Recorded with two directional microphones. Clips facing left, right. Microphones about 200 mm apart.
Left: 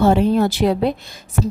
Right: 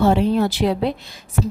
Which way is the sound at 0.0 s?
45° left (ahead or behind).